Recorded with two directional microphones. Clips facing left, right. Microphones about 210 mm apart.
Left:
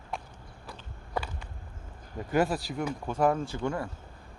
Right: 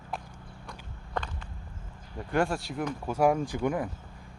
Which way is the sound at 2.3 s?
5° left (ahead or behind).